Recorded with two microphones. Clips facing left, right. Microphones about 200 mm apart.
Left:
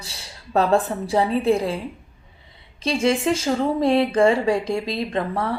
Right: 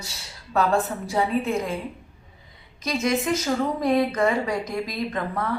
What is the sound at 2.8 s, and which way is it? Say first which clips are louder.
Speech: left 4 dB; 30° left (ahead or behind).